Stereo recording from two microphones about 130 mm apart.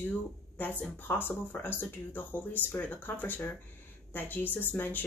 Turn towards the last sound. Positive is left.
turn(degrees=15)  # may be behind; listen again after turning